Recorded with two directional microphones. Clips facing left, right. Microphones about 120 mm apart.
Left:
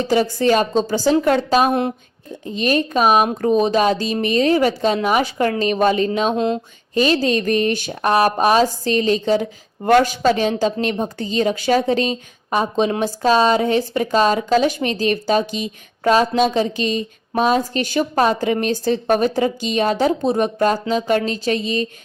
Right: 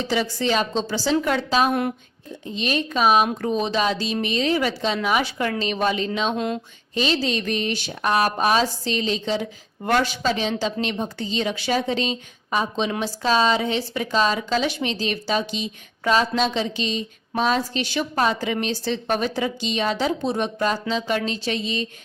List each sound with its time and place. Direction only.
0.0 s speech: 45° left (ahead or behind)
1.1 s a woman's voice: 35° left (ahead or behind)
1.4 s speech: 45° left (ahead or behind)
6.3 s a sound: 25° left (ahead or behind)
6.9 s speech: 50° left (ahead or behind)